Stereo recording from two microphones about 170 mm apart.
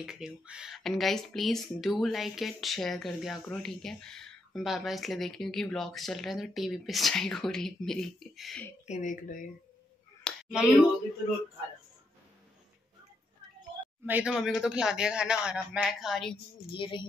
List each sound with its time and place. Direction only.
0.0 s speech: 5° right (ahead or behind)
8.8 s speech: 45° left (ahead or behind)
10.2 s a sound: centre (ahead or behind)
14.0 s speech: 5° right (ahead or behind)
16.7 s speech: 30° left (ahead or behind)